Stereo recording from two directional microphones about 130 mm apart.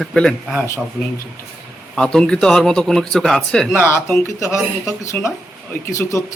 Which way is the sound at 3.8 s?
20° left (ahead or behind).